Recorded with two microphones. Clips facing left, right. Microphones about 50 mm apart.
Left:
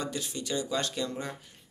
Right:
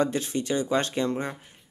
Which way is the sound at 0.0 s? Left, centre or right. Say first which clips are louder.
Right 9 dB; right.